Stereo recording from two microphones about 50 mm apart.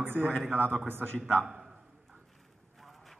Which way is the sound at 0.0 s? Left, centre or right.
Right.